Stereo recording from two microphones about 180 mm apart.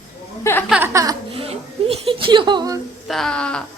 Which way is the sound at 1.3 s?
30° right (ahead or behind).